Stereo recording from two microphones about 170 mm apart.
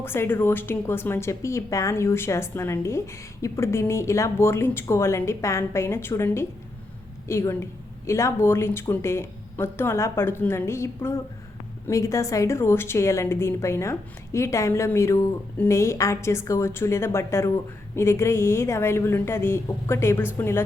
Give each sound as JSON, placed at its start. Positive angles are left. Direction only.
{"t": 0.0, "sound": "a woman's voice", "side_deg": 15}